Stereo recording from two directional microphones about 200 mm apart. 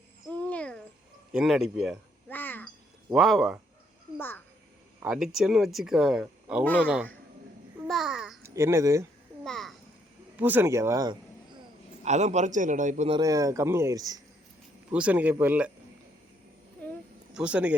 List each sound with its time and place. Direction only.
0.3 s a sound: 5° left (ahead or behind)
1.3 s speech: centre (ahead or behind)
2.3 s a sound: 10° left (ahead or behind)
3.1 s speech: centre (ahead or behind)
5.0 s speech: centre (ahead or behind)
7.9 s babbling: centre (ahead or behind)
8.4 s speech: 15° right (ahead or behind)
9.4 s babbling: centre (ahead or behind)
10.3 s speech: 10° right (ahead or behind)
12.0 s a man's voice: 35° right (ahead or behind)
13.1 s speech: 15° right (ahead or behind)
14.8 s speech: 5° right (ahead or behind)
16.8 s a sound: 10° left (ahead or behind)
17.3 s speech: 5° right (ahead or behind)